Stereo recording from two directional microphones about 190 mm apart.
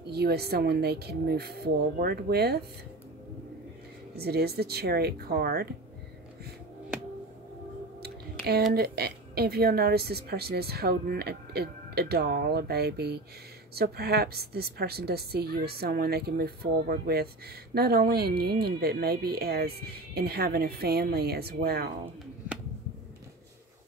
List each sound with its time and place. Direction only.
0.0 s speech: 55° right (ahead or behind)
4.1 s speech: 55° right (ahead or behind)
8.0 s a sound: 55° right (ahead or behind)
8.7 s speech: 55° right (ahead or behind)